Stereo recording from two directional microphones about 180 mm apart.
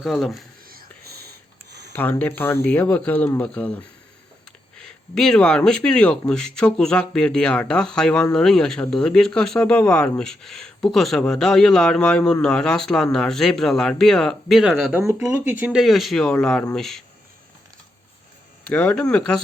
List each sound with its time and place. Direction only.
0.0 s speech: centre (ahead or behind)
0.7 s whispering: 55° right (ahead or behind)
1.9 s speech: 10° left (ahead or behind)
18.7 s speech: 10° left (ahead or behind)